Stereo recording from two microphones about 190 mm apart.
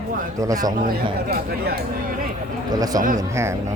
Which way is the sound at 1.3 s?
55° right (ahead or behind).